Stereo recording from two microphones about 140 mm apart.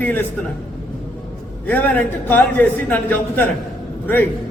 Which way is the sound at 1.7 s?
10° left (ahead or behind).